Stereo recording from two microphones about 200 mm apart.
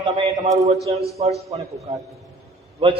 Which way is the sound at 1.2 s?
30° right (ahead or behind).